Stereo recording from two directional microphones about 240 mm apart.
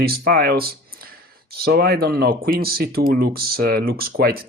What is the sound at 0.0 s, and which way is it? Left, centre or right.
Speech, right.